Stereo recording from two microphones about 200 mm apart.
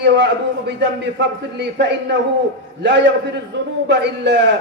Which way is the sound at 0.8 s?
60° right (ahead or behind).